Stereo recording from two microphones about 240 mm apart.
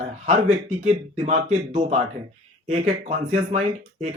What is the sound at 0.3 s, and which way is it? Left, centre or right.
Speech, right.